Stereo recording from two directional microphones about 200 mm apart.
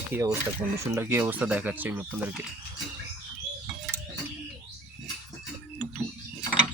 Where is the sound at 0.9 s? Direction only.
10° right (ahead or behind).